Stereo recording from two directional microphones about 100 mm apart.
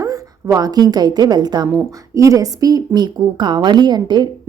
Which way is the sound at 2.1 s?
35° right (ahead or behind).